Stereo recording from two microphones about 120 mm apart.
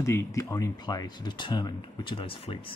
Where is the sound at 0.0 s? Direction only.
25° left (ahead or behind).